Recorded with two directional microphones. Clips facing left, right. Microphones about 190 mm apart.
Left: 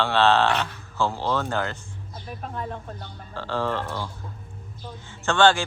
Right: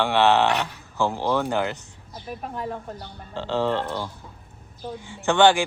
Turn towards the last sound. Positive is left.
turn(degrees=-15)  # may be behind; listen again after turning